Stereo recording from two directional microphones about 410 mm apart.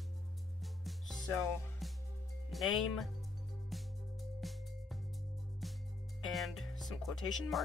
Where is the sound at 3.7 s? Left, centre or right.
Centre.